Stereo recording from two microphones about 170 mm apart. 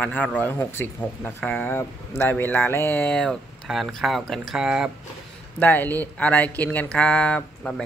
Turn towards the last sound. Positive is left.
turn(degrees=5)  # may be behind; listen again after turning